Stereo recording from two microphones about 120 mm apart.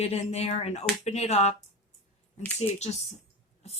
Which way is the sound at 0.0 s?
60° left (ahead or behind).